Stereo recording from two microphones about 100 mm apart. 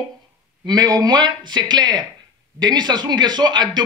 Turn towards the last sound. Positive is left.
turn(degrees=-45)  # may be behind; listen again after turning